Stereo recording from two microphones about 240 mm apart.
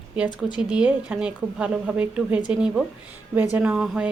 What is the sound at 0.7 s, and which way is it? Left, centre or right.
A woman's voice, centre.